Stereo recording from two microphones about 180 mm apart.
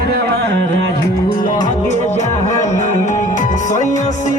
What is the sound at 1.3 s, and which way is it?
Music, 50° left (ahead or behind).